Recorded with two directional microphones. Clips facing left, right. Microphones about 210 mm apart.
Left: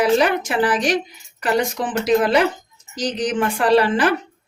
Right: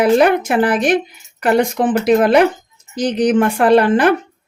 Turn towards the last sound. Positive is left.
turn(degrees=-55)  # may be behind; listen again after turning